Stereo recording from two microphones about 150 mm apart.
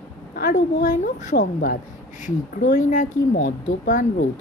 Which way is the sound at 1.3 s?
70° left (ahead or behind).